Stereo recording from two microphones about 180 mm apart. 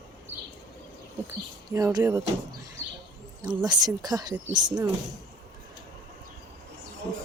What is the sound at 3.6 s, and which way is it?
Speech, 20° right (ahead or behind).